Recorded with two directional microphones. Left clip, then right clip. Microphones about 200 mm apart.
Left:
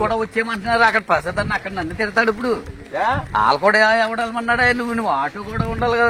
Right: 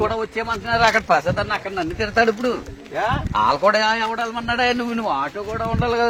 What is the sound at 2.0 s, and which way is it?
A man's voice, 40° left (ahead or behind).